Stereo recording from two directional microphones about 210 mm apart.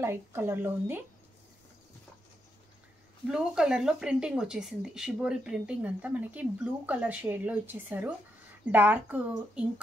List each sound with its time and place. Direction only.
0.0 s speech: 10° right (ahead or behind)
3.3 s speech: 5° right (ahead or behind)